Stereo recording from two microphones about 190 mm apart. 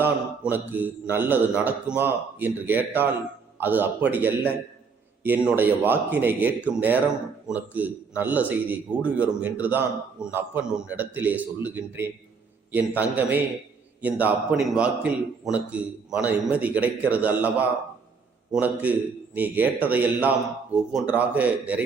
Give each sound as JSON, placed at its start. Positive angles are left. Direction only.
{"t": 0.0, "sound": "a man's voice", "side_deg": -10}